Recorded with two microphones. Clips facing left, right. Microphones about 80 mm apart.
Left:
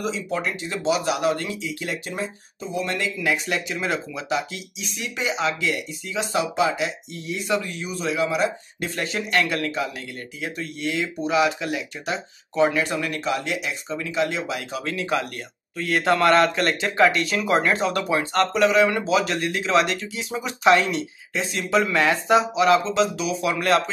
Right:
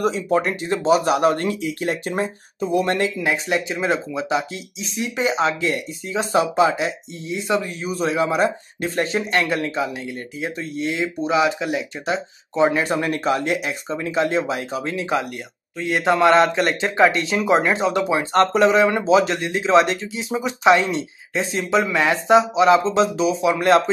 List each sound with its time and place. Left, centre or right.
0.0 s speech: right
3.0 s speech: right
18.3 s speech: right
21.8 s speech: centre
22.8 s speech: right